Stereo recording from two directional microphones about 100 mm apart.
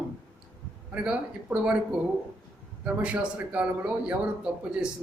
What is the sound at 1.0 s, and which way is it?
Speech, 10° right (ahead or behind).